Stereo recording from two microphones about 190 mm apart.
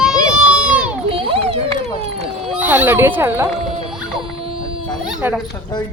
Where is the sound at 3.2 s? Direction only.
10° right (ahead or behind).